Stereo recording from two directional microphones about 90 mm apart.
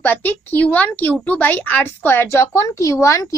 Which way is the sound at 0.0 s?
20° left (ahead or behind).